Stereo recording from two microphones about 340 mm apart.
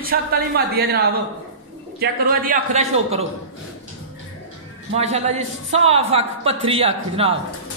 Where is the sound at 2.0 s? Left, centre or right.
Right.